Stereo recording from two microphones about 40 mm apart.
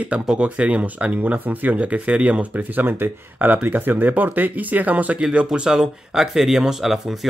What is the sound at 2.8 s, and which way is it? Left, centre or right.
Speech, right.